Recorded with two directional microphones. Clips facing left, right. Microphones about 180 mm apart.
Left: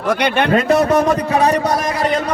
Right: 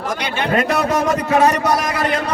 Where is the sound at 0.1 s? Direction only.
65° left (ahead or behind).